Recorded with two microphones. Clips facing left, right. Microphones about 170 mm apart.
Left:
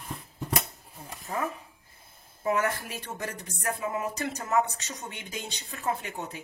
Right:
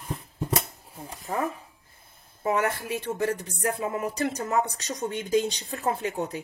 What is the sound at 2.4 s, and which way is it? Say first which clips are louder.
Speech: right 2 dB; 30° right (ahead or behind).